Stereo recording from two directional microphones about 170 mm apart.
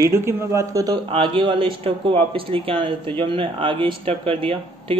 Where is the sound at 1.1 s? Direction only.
30° right (ahead or behind).